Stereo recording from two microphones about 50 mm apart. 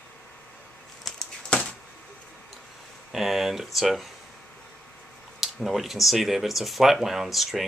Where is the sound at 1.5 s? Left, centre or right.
Centre.